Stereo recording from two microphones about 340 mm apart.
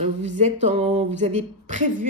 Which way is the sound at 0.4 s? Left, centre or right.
Centre.